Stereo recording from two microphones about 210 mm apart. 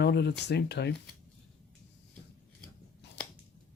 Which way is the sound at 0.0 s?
50° left (ahead or behind).